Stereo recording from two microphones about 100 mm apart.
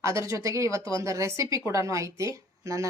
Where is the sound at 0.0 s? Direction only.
30° right (ahead or behind).